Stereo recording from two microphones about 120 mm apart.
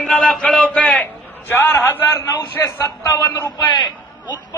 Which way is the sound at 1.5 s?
20° left (ahead or behind).